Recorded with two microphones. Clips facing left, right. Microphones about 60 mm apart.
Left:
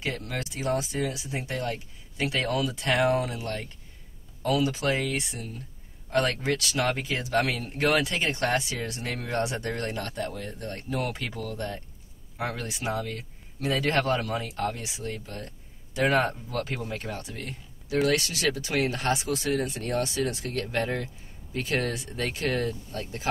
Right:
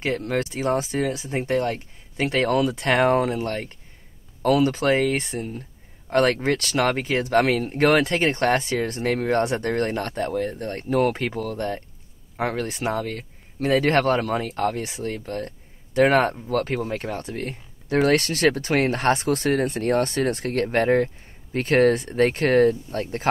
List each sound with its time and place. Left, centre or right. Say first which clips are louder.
0.0 s speech: right 8 dB; right